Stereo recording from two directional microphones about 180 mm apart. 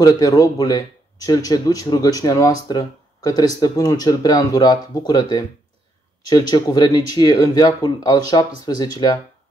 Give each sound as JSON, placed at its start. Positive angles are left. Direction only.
{"t": 0.0, "sound": "speech", "side_deg": 20}